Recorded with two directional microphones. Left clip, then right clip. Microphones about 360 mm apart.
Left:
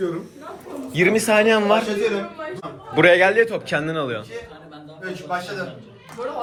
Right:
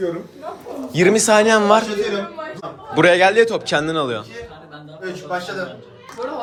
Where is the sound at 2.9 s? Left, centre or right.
Centre.